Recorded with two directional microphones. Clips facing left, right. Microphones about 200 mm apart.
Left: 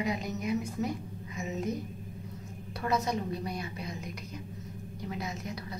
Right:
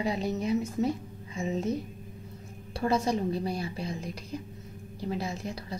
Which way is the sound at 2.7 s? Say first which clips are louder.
Right 4 dB; 30° right (ahead or behind).